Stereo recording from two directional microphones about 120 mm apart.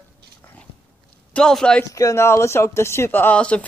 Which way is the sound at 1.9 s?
25° left (ahead or behind).